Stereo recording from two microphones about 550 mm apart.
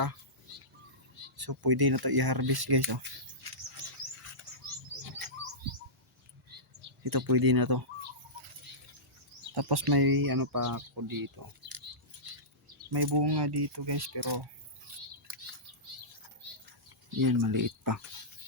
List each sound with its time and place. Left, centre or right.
1.4 s speech: right
7.0 s speech: right
9.6 s speech: right
12.6 s speech: right
17.2 s speech: right